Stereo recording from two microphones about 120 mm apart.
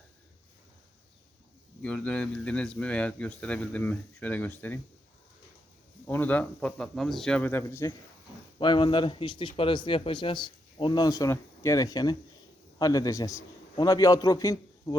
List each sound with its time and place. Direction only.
1.8 s speech: 10° left (ahead or behind)
6.1 s speech: 15° left (ahead or behind)
8.5 s a man's voice: 40° left (ahead or behind)
11.0 s a man's voice: 30° left (ahead or behind)